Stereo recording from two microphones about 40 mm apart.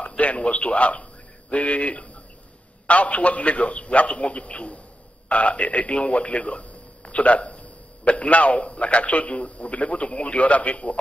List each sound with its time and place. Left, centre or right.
0.2 s speech: left